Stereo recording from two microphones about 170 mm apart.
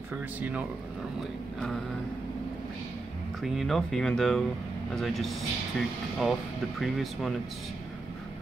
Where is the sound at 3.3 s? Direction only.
Centre (ahead or behind).